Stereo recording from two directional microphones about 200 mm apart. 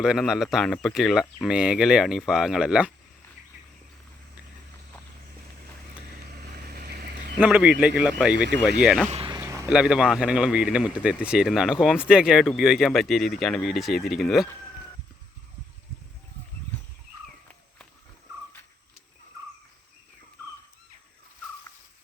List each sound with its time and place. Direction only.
0.0 s a man's voice: 5° right (ahead or behind)
6.3 s vehicle: 50° right (ahead or behind)
7.3 s a man's voice: 5° right (ahead or behind)
9.0 s a sound: 30° right (ahead or behind)
9.4 s a sound: 15° right (ahead or behind)
9.6 s a man's voice: 5° right (ahead or behind)